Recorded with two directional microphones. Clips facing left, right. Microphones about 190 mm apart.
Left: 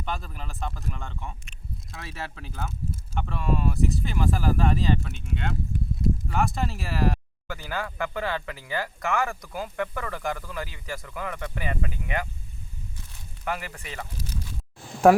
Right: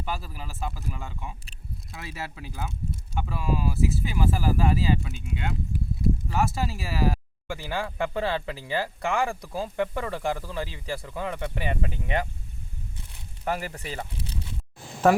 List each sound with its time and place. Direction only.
0.0 s speech: 5° right (ahead or behind)
7.4 s speech: 25° right (ahead or behind)
13.4 s speech: 35° right (ahead or behind)